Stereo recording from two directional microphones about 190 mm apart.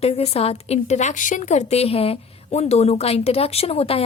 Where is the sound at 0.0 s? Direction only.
35° left (ahead or behind).